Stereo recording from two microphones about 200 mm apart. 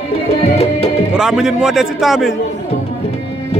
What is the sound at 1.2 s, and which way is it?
A man's voice, 5° right (ahead or behind).